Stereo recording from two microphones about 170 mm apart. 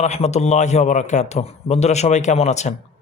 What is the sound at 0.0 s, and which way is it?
A man's voice, 40° left (ahead or behind).